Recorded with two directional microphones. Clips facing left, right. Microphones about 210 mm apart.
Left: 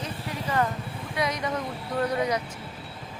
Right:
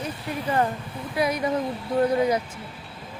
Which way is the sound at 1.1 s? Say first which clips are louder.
Right 5 dB; 30° right (ahead or behind).